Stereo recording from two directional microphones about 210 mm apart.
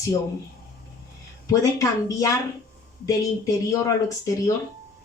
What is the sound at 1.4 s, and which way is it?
A woman's voice, 15° left (ahead or behind).